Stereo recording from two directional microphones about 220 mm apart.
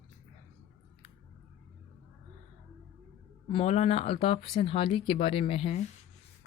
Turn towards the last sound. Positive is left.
turn(degrees=25)  # may be behind; listen again after turning